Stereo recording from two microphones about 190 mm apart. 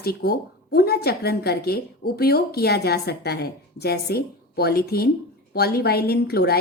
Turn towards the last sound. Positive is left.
turn(degrees=55)  # may be behind; listen again after turning